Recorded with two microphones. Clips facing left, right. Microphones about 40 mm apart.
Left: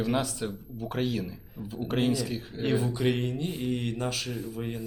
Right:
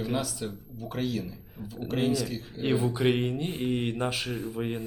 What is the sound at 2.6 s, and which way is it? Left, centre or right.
Speech, centre.